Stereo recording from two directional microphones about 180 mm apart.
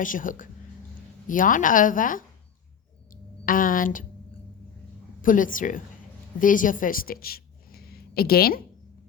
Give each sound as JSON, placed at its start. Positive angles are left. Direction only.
{"t": 0.0, "sound": "a woman's voice", "side_deg": 45}
{"t": 3.1, "sound": "a sound", "side_deg": 50}
{"t": 5.2, "sound": "a woman's voice", "side_deg": 50}